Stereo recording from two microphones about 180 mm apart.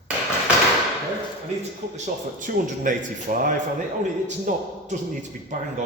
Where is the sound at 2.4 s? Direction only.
45° right (ahead or behind).